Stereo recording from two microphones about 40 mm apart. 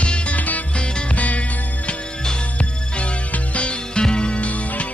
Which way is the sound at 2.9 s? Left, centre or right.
Left.